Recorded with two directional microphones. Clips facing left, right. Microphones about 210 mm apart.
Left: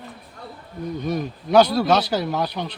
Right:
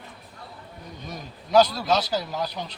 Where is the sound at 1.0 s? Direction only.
65° left (ahead or behind).